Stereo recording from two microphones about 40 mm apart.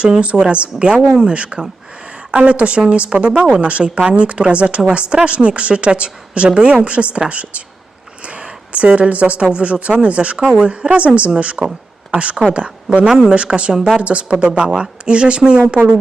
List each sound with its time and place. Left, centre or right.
0.4 s a woman's voice: right
1.0 s a woman's voice: centre
3.6 s a woman's voice: right
10.3 s a woman's voice: centre
10.6 s a woman's voice: right
13.1 s a woman's voice: centre
13.3 s a woman's voice: right
13.7 s speech: centre
14.0 s a woman's voice: right